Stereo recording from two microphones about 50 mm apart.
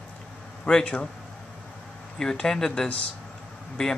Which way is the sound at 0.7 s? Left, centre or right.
Centre.